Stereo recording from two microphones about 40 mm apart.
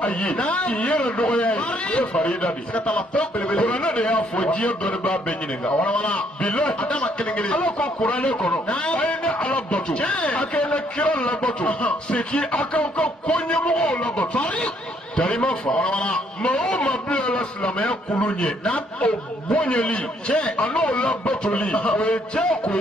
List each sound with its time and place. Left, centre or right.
0.3 s a man's voice: left
1.2 s a man's voice: left
4.8 s a man's voice: centre
7.8 s a man's voice: left; by 11.1 s centre
11.1 s a man's voice: left
17.1 s a man's voice: left